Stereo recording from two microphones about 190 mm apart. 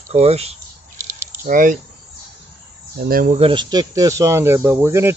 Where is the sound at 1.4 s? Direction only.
45° right (ahead or behind).